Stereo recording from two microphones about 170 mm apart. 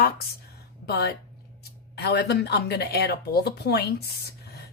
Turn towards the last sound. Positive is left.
turn(degrees=70)  # may be behind; listen again after turning